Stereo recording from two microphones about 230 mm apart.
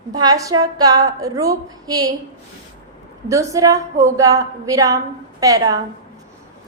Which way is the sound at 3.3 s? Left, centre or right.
Centre.